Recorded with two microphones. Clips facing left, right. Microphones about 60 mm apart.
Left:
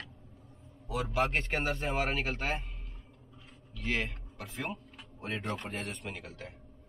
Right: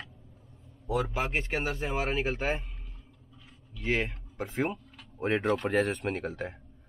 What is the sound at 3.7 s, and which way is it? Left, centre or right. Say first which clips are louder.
Speech: right 4 dB; right.